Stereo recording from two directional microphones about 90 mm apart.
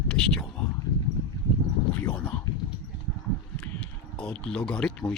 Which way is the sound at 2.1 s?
15° left (ahead or behind).